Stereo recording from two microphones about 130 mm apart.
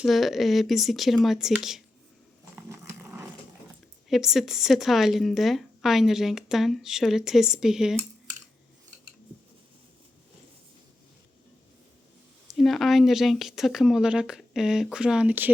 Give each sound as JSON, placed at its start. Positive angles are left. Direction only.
{"t": 0.0, "sound": "a woman's voice", "side_deg": 0}
{"t": 2.6, "sound": "dog", "side_deg": -20}
{"t": 4.1, "sound": "a woman's voice", "side_deg": -5}
{"t": 12.5, "sound": "a woman's voice", "side_deg": 0}